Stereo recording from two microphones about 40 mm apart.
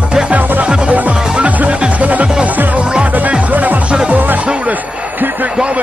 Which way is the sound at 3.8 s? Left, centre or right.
Right.